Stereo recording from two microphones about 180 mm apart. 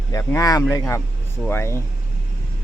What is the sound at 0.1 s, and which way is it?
Speech, 15° left (ahead or behind).